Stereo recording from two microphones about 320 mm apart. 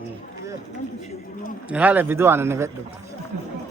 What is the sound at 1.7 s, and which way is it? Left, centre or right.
Speech, centre.